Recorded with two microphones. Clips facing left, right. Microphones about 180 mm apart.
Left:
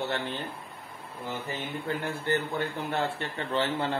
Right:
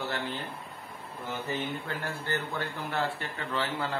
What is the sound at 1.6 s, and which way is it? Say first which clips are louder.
Speech: left 2 dB; 20° left (ahead or behind).